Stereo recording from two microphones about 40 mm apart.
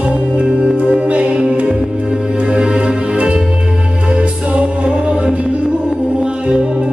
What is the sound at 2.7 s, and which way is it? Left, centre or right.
Music, right.